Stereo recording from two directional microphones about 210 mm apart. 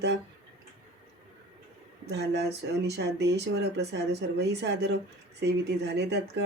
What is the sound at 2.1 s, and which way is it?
Speech, 55° right (ahead or behind).